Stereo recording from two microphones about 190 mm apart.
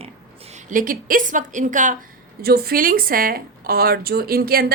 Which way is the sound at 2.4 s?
55° right (ahead or behind).